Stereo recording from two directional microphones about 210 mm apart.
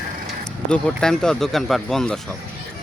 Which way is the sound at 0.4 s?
5° left (ahead or behind).